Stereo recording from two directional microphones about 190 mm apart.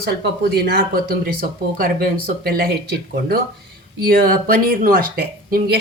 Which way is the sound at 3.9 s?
55° right (ahead or behind).